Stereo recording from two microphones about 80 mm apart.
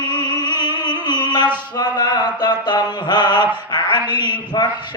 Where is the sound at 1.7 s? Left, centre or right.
Left.